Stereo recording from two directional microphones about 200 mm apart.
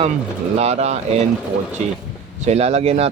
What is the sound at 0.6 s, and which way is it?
Speech, 30° right (ahead or behind).